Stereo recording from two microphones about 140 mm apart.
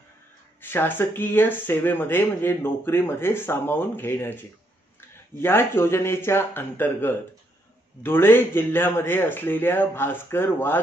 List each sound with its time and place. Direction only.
0.6 s speech: 15° left (ahead or behind)